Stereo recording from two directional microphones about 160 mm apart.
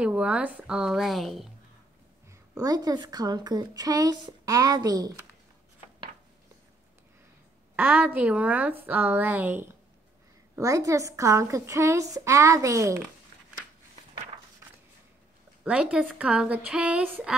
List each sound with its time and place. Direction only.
0.0 s a woman's voice: 5° right (ahead or behind)
2.5 s a woman's voice: 20° right (ahead or behind)
7.7 s a woman's voice: 10° right (ahead or behind)
15.6 s a woman's voice: 5° right (ahead or behind)